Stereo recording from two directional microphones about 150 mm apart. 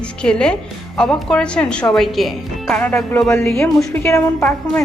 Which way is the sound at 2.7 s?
10° left (ahead or behind).